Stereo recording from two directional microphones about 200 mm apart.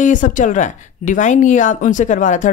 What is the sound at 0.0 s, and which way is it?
Speech, 40° left (ahead or behind).